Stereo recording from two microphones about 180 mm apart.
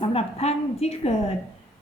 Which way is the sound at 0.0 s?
35° left (ahead or behind).